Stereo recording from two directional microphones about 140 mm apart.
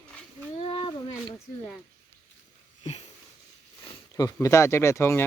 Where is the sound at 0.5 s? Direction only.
40° left (ahead or behind).